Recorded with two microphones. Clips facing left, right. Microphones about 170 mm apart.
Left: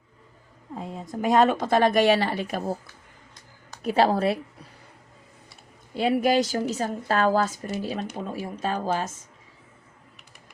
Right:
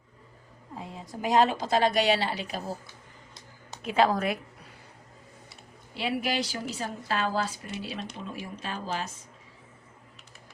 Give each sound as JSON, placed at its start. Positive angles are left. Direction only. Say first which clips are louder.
{"t": 0.9, "sound": "a woman's voice", "louder": "left 3 dB", "side_deg": 50}
{"t": 3.8, "sound": "speech", "louder": "left 3 dB", "side_deg": 35}
{"t": 6.0, "sound": "a woman's voice", "louder": "left 8 dB", "side_deg": 45}